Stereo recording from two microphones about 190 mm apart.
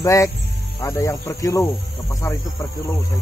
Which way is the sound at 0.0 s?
15° left (ahead or behind).